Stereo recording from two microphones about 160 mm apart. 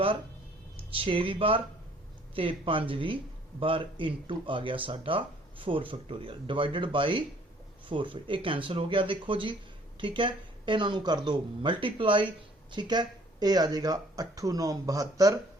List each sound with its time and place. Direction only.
0.9 s speech: 35° right (ahead or behind)